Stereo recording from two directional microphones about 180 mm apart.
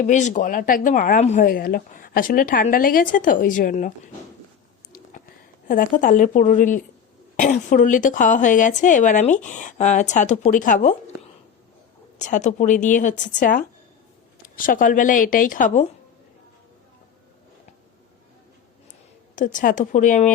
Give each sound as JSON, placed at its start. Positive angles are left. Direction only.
{"t": 0.0, "sound": "speech", "side_deg": 40}
{"t": 5.6, "sound": "speech", "side_deg": 50}
{"t": 12.2, "sound": "speech", "side_deg": 40}
{"t": 19.4, "sound": "speech", "side_deg": 45}